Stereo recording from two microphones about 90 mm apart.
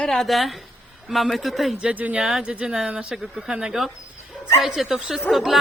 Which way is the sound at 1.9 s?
15° right (ahead or behind).